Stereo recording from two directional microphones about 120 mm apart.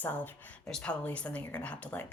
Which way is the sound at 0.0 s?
15° left (ahead or behind).